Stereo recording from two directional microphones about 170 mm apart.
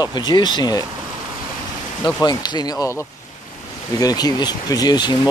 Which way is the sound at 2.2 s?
25° left (ahead or behind).